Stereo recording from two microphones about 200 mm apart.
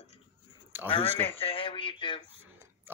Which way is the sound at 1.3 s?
30° left (ahead or behind).